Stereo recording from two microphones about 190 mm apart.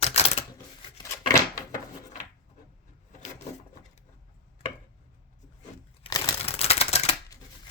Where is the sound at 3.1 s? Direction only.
40° left (ahead or behind).